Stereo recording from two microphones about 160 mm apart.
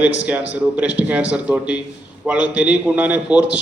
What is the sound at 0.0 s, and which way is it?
A man's voice, 10° right (ahead or behind).